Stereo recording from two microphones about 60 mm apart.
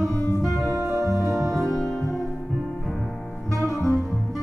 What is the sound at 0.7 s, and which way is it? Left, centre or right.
Music, right.